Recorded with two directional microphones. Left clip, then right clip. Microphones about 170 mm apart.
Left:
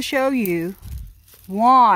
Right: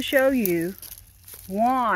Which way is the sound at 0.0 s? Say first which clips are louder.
Even; 25° left (ahead or behind).